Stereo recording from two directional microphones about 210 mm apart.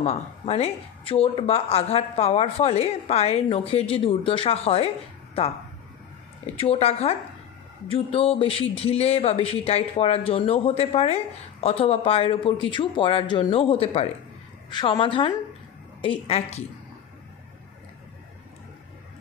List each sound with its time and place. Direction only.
0.0 s speech: 30° left (ahead or behind)
6.6 s speech: 30° left (ahead or behind)